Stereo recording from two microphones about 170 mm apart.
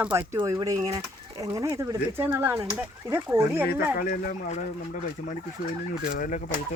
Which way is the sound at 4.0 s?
55° left (ahead or behind).